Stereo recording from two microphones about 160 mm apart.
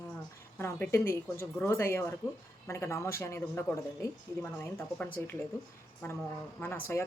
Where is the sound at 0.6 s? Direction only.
15° left (ahead or behind).